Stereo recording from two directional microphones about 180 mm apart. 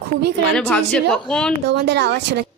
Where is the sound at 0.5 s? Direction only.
5° left (ahead or behind).